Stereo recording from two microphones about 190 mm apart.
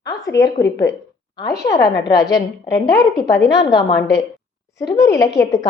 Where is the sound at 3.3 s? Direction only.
65° left (ahead or behind).